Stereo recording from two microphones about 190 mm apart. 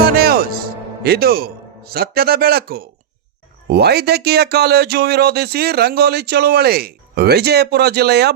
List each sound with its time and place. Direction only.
0.0 s music: 55° right (ahead or behind)
3.7 s speech: 60° right (ahead or behind)